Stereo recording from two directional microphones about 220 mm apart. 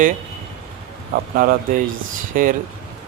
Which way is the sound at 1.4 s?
40° right (ahead or behind).